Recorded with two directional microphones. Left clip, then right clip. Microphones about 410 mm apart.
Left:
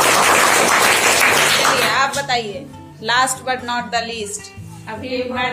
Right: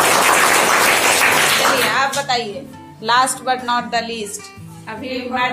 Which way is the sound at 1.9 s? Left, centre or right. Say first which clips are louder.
Even; centre.